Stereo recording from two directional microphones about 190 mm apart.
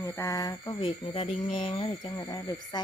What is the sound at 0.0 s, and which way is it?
Speech, 15° left (ahead or behind).